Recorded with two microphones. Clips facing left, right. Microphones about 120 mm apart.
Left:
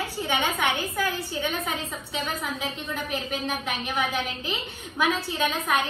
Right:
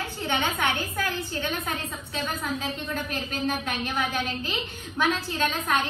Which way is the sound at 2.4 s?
Centre (ahead or behind).